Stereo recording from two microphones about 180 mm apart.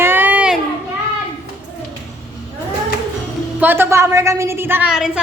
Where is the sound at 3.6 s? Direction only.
10° right (ahead or behind).